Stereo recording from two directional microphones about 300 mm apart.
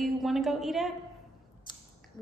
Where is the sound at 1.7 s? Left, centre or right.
Centre.